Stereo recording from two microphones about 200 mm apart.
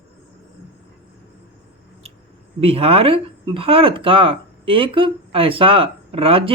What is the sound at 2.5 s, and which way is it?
Speech, 30° right (ahead or behind).